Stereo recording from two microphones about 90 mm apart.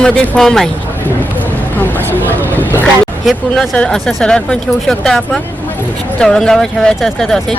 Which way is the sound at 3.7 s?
10° left (ahead or behind).